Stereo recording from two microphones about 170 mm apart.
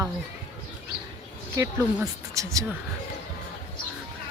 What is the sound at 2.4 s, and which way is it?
Speech, 20° right (ahead or behind).